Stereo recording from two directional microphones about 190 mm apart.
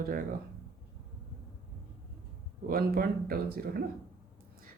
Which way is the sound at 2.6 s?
50° right (ahead or behind).